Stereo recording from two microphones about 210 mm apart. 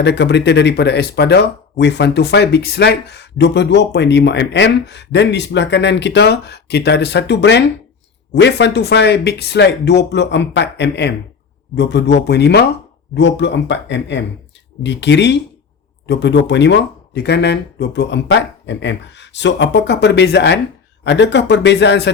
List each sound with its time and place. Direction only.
0.0 s speech: 55° left (ahead or behind)